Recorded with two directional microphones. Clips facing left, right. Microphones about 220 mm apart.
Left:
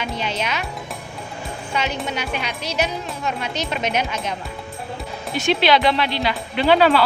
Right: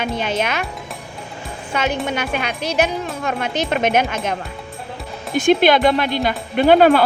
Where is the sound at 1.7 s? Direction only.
50° right (ahead or behind).